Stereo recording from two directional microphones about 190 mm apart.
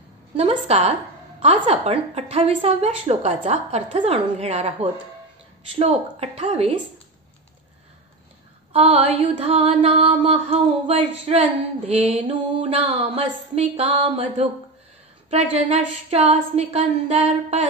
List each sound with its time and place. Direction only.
0.4 s mantra: 35° right (ahead or behind)
8.7 s mantra: 30° right (ahead or behind)
15.5 s mantra: 35° right (ahead or behind)